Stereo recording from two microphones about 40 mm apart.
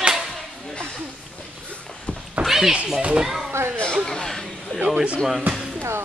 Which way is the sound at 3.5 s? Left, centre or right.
Right.